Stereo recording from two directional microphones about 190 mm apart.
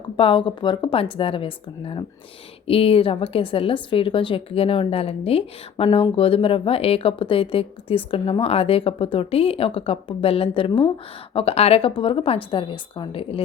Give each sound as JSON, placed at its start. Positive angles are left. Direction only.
{"t": 0.2, "sound": "a woman's voice", "side_deg": 25}